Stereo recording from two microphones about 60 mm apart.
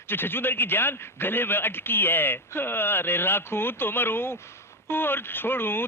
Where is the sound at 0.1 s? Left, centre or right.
Left.